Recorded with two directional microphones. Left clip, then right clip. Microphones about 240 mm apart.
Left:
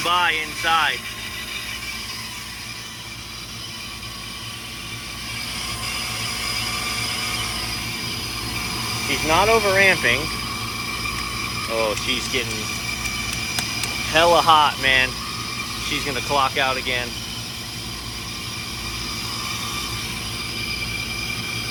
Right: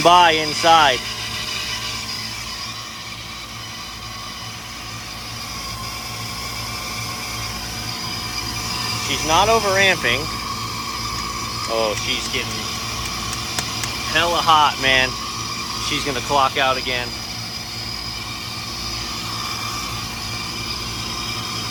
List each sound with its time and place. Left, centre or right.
0.0 s speech: right
9.0 s speech: centre
11.7 s speech: centre
14.1 s speech: centre